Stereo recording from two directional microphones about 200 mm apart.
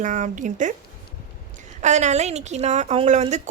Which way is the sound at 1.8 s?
35° right (ahead or behind).